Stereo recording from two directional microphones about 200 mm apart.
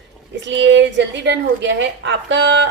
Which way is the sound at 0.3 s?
60° right (ahead or behind).